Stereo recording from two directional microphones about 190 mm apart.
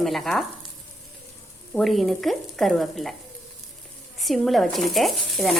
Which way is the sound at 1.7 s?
Centre (ahead or behind).